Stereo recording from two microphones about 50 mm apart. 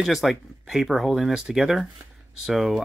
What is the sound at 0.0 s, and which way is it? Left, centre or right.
Speech, centre.